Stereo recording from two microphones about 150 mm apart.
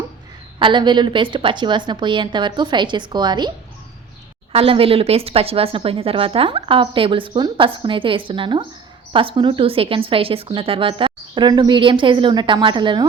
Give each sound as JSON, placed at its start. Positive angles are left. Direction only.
{"t": 0.6, "sound": "a woman's voice", "side_deg": -30}
{"t": 4.5, "sound": "a woman's voice", "side_deg": -40}